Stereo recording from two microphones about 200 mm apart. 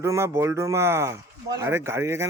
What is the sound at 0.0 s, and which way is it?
Speech, 15° right (ahead or behind).